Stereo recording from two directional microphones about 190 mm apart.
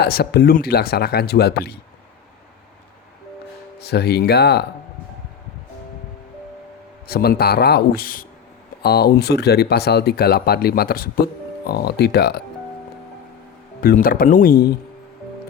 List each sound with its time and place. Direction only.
0.0 s speech: 55° left (ahead or behind)
3.8 s speech: 60° left (ahead or behind)
7.1 s speech: 55° left (ahead or behind)
13.8 s speech: 50° left (ahead or behind)